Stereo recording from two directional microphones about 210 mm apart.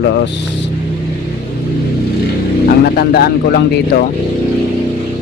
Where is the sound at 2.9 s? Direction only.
50° left (ahead or behind).